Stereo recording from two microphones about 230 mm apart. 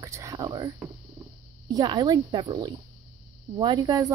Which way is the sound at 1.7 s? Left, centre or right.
Centre.